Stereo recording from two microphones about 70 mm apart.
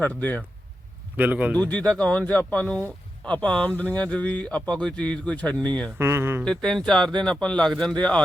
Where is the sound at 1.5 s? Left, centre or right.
Left.